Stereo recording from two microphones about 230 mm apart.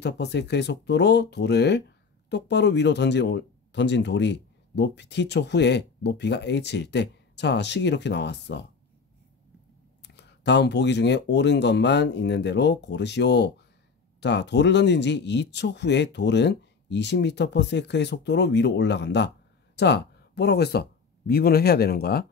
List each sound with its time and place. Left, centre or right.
0.0 s speech: left
10.0 s speech: left